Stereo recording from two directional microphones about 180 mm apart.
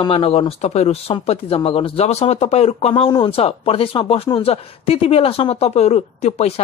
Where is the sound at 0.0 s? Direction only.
30° left (ahead or behind).